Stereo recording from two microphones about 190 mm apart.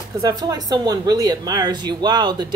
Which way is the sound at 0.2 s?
20° right (ahead or behind).